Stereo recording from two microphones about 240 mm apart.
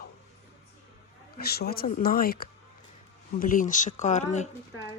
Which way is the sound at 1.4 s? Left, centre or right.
Left.